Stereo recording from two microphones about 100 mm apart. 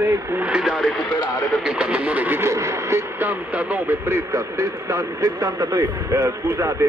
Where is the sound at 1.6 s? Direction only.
10° right (ahead or behind).